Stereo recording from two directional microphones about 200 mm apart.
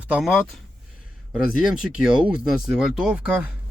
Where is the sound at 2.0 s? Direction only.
5° right (ahead or behind).